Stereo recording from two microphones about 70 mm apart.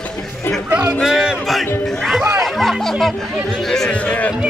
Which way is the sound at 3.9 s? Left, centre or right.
Centre.